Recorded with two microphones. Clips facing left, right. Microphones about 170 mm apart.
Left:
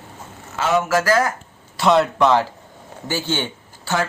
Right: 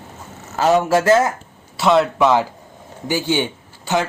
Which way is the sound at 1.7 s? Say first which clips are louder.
Right 1 dB; centre (ahead or behind).